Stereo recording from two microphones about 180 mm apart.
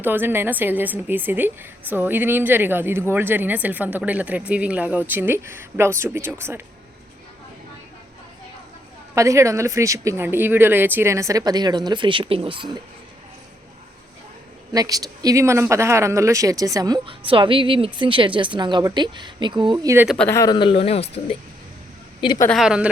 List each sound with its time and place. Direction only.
0.0 s a woman's voice: 10° right (ahead or behind)
9.1 s a woman's voice: 15° right (ahead or behind)
14.7 s speech: 20° right (ahead or behind)
20.1 s speech: 10° left (ahead or behind); by 22.4 s 25° left (ahead or behind)
22.4 s a woman's voice: centre (ahead or behind)